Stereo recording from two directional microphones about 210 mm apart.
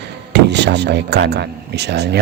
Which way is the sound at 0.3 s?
55° right (ahead or behind).